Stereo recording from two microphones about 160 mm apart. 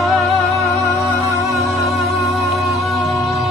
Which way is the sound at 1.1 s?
20° left (ahead or behind).